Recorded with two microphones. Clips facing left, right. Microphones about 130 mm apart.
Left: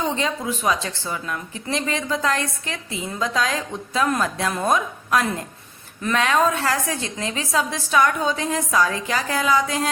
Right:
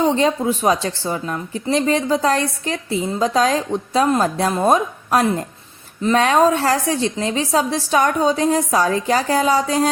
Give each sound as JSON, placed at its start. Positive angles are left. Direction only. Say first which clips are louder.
{"t": 0.0, "sound": "a woman's voice", "louder": "right 7 dB", "side_deg": -35}